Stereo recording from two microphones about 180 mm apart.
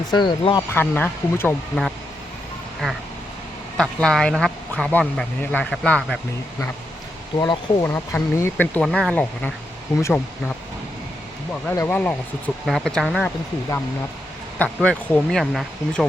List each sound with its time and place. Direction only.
0.1 s speech: 25° left (ahead or behind)
0.7 s speech: 10° left (ahead or behind)
2.8 s speech: 5° left (ahead or behind)
7.3 s speech: 20° left (ahead or behind)
11.7 s speech: 10° left (ahead or behind)
14.8 s speech: 5° left (ahead or behind)